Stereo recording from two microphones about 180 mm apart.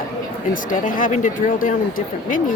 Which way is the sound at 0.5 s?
50° left (ahead or behind).